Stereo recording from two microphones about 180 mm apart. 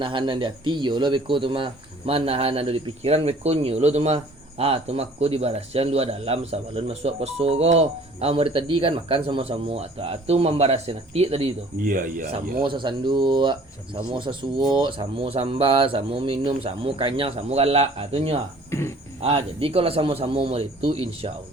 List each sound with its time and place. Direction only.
0.0 s speech: 25° right (ahead or behind)
11.8 s speech: 50° right (ahead or behind)
12.6 s speech: 25° right (ahead or behind)
18.7 s speech: 15° left (ahead or behind)
19.2 s speech: 30° right (ahead or behind)